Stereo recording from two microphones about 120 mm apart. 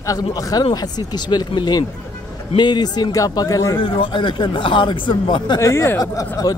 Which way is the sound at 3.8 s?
40° left (ahead or behind).